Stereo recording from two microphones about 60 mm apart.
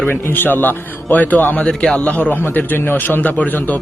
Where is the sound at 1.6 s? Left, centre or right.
Centre.